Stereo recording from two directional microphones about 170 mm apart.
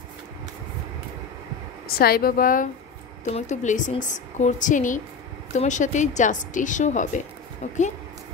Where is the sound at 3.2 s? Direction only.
45° left (ahead or behind).